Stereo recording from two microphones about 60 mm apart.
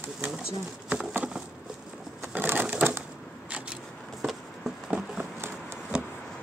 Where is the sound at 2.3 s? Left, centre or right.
Right.